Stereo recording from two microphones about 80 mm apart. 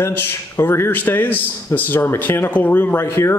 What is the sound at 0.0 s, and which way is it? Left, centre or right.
A man's voice, left.